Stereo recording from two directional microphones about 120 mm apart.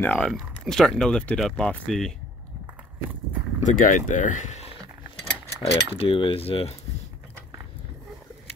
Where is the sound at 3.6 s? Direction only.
90° left.